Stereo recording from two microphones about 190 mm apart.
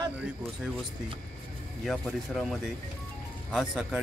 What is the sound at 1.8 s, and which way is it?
Speech, centre (ahead or behind).